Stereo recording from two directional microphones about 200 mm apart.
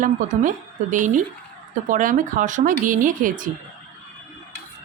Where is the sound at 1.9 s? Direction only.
40° right (ahead or behind).